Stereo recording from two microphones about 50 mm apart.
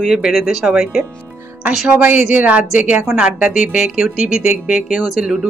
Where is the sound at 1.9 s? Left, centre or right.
Right; by 4.9 s centre.